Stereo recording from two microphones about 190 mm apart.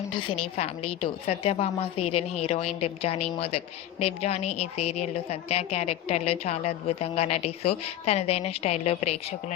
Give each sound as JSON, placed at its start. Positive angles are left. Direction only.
{"t": 0.1, "sound": "a woman's voice", "side_deg": 25}